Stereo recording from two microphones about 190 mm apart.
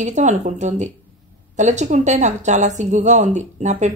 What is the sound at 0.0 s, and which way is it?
Speech, 40° right (ahead or behind).